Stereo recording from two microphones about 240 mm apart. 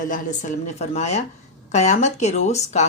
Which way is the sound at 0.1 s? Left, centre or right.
Left.